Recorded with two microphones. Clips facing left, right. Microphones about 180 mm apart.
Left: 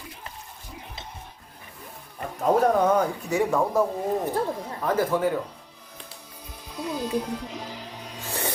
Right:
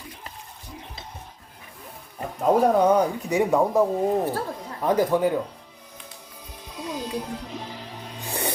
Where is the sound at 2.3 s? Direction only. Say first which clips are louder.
Right 2 dB; 10° right (ahead or behind).